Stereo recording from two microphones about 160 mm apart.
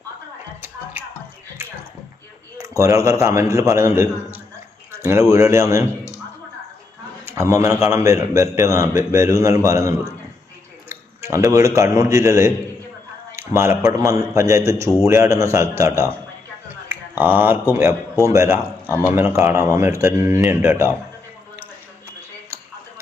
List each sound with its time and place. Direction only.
0.9 s music: 10° right (ahead or behind)
2.6 s a man's voice: 20° right (ahead or behind)
4.9 s a sound: 15° right (ahead or behind)
5.3 s a man's voice: 20° right (ahead or behind)
7.3 s a man's voice: 15° right (ahead or behind)
10.8 s a sound: 15° right (ahead or behind)
11.5 s a man's voice: 20° right (ahead or behind)